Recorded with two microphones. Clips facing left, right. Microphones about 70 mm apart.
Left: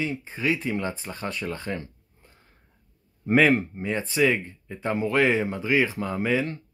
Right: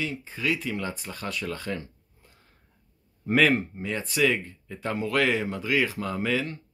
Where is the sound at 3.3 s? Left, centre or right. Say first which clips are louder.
Left 2 dB; left.